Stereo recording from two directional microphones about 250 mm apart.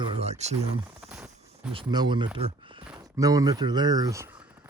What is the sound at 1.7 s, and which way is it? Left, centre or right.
Speech, centre.